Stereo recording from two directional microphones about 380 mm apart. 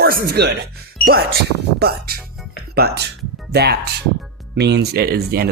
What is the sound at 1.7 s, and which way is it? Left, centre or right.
Speech, right.